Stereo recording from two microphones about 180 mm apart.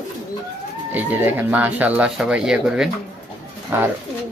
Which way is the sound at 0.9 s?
10° right (ahead or behind).